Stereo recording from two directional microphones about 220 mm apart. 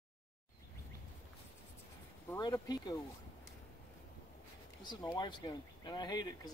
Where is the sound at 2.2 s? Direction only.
15° left (ahead or behind).